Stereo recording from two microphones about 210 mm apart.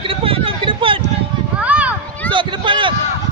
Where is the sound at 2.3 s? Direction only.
25° right (ahead or behind).